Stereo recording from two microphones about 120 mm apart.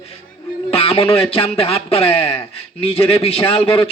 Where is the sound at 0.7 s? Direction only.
50° left (ahead or behind).